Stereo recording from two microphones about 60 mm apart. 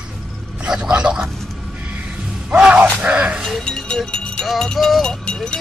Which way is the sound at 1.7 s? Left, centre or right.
Right.